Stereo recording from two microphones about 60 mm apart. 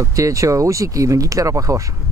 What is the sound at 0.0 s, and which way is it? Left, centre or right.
Speech, right.